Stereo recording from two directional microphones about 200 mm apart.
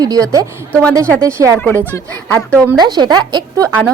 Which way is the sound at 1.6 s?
10° left (ahead or behind).